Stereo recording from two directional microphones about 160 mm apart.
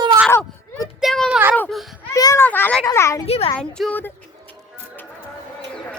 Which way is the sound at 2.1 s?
20° left (ahead or behind).